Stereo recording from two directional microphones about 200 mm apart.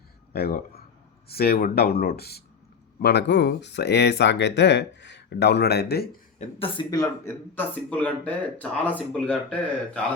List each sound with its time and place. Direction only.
0.3 s speech: 50° left (ahead or behind)
6.4 s speech: 25° left (ahead or behind); by 10.0 s 5° left (ahead or behind)